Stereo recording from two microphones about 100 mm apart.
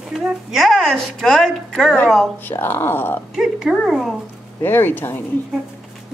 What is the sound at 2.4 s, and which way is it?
Speech, 20° left (ahead or behind).